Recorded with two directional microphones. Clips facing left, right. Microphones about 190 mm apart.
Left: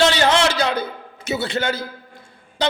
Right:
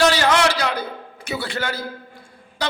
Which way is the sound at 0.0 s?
25° left (ahead or behind).